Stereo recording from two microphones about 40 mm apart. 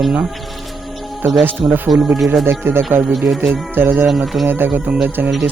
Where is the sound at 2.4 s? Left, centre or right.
Right.